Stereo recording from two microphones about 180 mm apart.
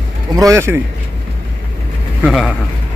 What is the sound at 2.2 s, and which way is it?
Speech, centre (ahead or behind).